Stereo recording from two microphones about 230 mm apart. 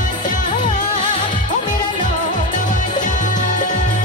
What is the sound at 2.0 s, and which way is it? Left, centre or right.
Music, left.